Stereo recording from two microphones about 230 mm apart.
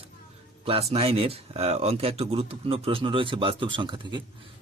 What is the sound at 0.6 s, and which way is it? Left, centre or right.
Speech, right.